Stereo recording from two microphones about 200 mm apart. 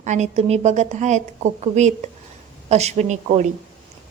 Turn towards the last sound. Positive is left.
turn(degrees=-35)  # may be behind; listen again after turning